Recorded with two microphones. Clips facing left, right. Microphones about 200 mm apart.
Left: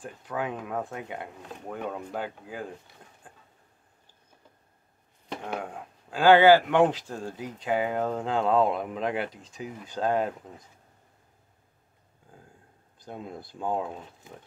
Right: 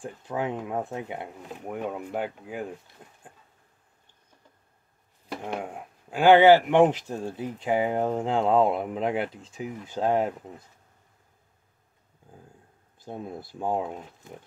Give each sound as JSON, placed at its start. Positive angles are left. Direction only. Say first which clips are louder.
{"t": 0.0, "sound": "speech", "louder": "right 2 dB", "side_deg": -25}
{"t": 5.5, "sound": "speech", "louder": "right 1 dB", "side_deg": -20}
{"t": 13.1, "sound": "speech", "louder": "right 3 dB", "side_deg": -20}